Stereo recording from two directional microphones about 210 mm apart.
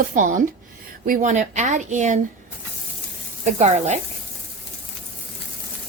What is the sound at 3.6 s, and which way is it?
Speech, 30° right (ahead or behind).